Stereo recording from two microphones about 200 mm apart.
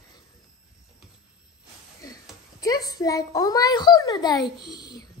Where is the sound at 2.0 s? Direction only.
20° left (ahead or behind).